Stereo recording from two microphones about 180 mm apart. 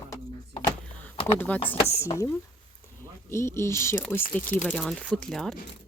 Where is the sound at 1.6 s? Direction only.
30° left (ahead or behind).